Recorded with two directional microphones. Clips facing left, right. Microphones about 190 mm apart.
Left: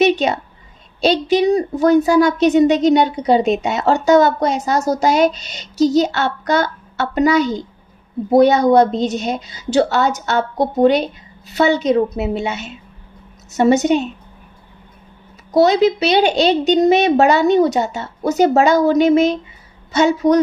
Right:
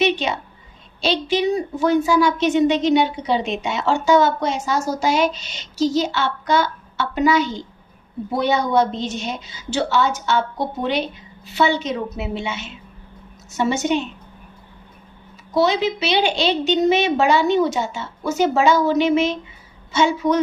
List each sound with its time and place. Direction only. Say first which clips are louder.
0.0 s a sound: left 5 dB; 40° left (ahead or behind)
1.0 s a woman's voice: left 5 dB; 40° left (ahead or behind)
13.8 s a woman's voice: left 5 dB; 40° left (ahead or behind)
15.5 s a woman's voice: left 6 dB; 40° left (ahead or behind)